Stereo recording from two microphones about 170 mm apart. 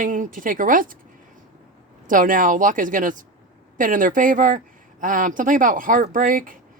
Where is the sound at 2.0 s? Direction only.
50° right (ahead or behind).